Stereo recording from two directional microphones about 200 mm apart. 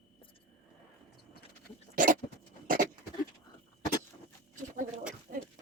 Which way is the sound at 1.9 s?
40° right (ahead or behind).